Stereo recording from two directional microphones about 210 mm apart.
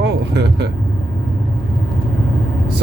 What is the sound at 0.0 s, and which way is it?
Vehicle, 50° right (ahead or behind).